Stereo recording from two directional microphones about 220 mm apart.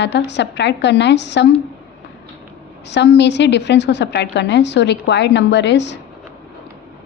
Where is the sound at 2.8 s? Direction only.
50° left (ahead or behind).